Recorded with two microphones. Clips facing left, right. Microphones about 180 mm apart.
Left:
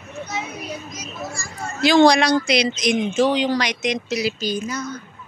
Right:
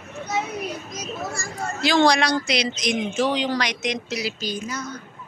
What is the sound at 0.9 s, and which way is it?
Speech, 60° right (ahead or behind).